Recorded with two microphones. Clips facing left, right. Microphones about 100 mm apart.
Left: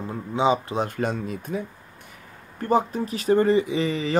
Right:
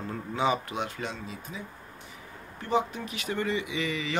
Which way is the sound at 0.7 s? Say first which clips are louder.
Left 8 dB; 45° left (ahead or behind).